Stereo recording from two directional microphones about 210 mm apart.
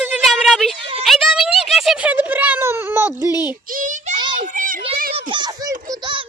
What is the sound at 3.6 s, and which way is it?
Speech, 40° right (ahead or behind).